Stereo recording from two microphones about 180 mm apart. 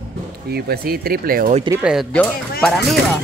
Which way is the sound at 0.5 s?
60° right (ahead or behind).